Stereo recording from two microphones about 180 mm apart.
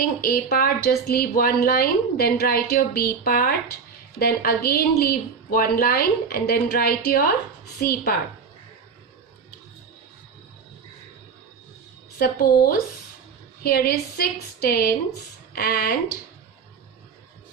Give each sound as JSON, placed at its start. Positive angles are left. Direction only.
{"t": 0.2, "sound": "speech", "side_deg": 60}
{"t": 12.2, "sound": "speech", "side_deg": 55}